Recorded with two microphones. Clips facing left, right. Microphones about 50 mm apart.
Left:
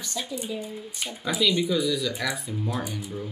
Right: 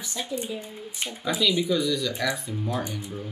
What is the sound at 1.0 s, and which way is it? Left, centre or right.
Speech, centre.